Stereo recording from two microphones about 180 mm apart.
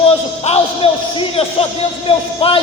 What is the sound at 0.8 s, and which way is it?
Speech, 30° left (ahead or behind).